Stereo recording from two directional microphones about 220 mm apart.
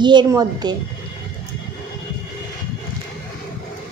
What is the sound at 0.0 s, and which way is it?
Speech, 20° right (ahead or behind).